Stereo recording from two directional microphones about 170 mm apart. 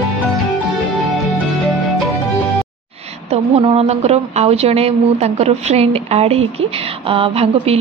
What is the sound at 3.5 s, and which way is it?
Speech, 35° right (ahead or behind).